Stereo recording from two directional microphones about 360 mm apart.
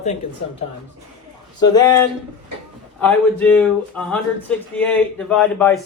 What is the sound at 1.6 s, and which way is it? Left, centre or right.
Speech, centre.